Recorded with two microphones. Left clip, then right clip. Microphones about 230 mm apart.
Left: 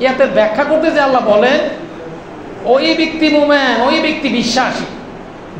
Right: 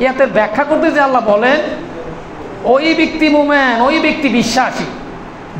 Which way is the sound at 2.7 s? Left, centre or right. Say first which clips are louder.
Even; right.